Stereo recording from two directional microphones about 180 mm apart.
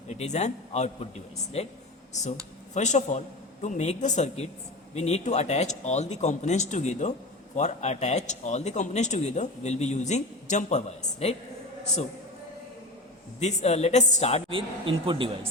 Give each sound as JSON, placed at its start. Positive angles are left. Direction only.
{"t": 0.1, "sound": "a man's voice", "side_deg": 40}
{"t": 2.7, "sound": "a man's voice", "side_deg": 40}
{"t": 13.4, "sound": "a man's voice", "side_deg": 40}
{"t": 14.5, "sound": "speech", "side_deg": -30}